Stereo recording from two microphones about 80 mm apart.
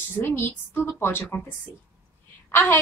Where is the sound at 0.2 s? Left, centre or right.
Left.